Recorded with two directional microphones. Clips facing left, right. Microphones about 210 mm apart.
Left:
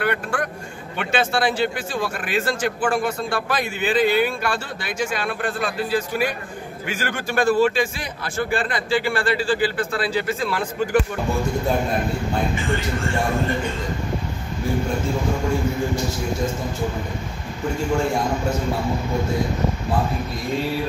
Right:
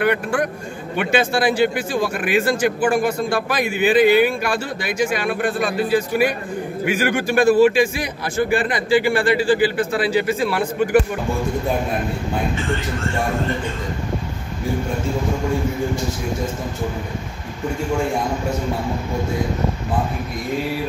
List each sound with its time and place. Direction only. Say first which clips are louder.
0.0 s speech: right 5 dB; 15° right (ahead or behind)